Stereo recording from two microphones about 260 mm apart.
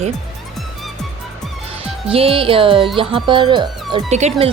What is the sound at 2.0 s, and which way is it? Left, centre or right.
Speech, right.